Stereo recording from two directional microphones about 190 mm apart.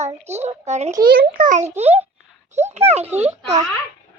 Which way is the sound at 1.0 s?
50° right (ahead or behind).